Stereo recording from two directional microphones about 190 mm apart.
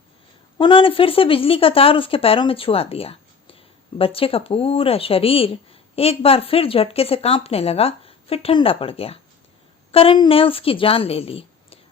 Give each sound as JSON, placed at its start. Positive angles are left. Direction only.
{"t": 0.6, "sound": "a woman's voice", "side_deg": 25}